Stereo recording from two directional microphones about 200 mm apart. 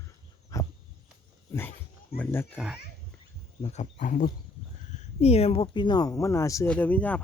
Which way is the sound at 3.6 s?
25° left (ahead or behind).